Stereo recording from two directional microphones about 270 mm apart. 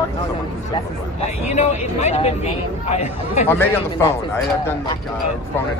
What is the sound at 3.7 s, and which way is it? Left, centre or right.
Speech, centre.